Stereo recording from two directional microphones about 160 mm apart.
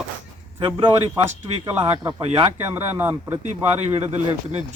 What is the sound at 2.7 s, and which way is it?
Speech, 15° right (ahead or behind).